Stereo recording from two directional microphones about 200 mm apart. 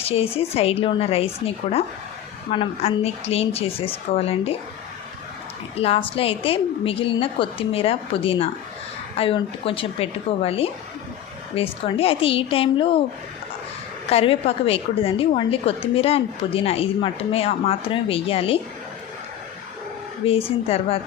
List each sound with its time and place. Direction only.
0.0 s a woman's voice: 30° left (ahead or behind)
5.7 s a woman's voice: 30° left (ahead or behind)
14.1 s a woman's voice: 30° left (ahead or behind)
20.2 s a woman's voice: 30° left (ahead or behind)